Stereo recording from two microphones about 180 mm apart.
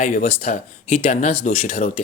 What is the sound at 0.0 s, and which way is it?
Speech, 45° left (ahead or behind).